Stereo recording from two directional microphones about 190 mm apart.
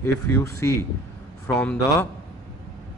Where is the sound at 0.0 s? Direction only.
15° left (ahead or behind).